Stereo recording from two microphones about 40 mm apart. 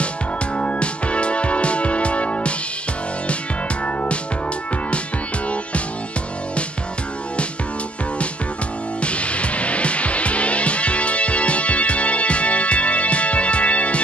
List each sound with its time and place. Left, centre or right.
0.6 s music: left
3.8 s music: left
9.0 s music: left